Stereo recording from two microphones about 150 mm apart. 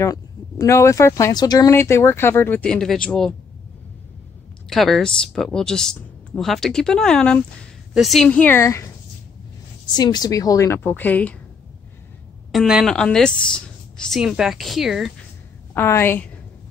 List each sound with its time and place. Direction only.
0.0 s speech: 20° left (ahead or behind); by 3.3 s 5° left (ahead or behind)
4.6 s a woman's voice: centre (ahead or behind)
8.3 s a woman's voice: 10° left (ahead or behind)
12.5 s a woman's voice: centre (ahead or behind)
15.7 s speech: 15° left (ahead or behind)